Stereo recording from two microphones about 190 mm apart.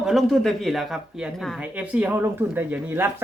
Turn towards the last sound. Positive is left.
turn(degrees=-10)  # may be behind; listen again after turning